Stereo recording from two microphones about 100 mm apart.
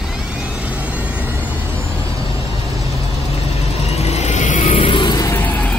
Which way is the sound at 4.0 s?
90° left.